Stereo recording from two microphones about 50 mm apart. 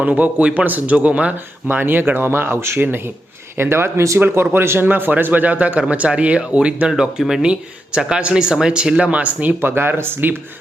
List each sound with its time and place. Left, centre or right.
0.0 s a man's voice: right
1.6 s speech: right
2.7 s speech: right
3.6 s speech: right
4.2 s speech: right
4.9 s a man's voice: right
6.9 s speech: centre
7.4 s speech: centre
9.5 s speech: right